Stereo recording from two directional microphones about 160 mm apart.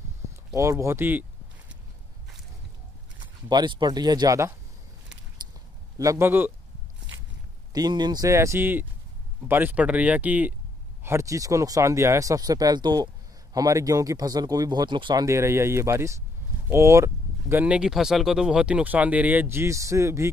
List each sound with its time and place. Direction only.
0.6 s speech: 20° right (ahead or behind)
3.4 s speech: 25° right (ahead or behind)
5.9 s speech: 20° right (ahead or behind)
7.7 s speech: 25° right (ahead or behind)